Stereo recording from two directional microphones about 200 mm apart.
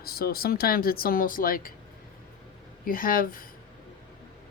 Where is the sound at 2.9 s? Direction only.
45° left (ahead or behind).